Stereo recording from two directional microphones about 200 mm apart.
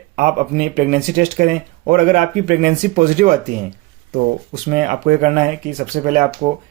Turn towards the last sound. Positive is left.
turn(degrees=-40)  # may be behind; listen again after turning